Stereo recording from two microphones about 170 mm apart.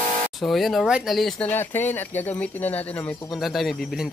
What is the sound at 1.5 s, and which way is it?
A man's voice, 10° left (ahead or behind).